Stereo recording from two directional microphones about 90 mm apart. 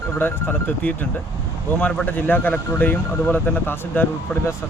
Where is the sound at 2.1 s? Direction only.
20° left (ahead or behind).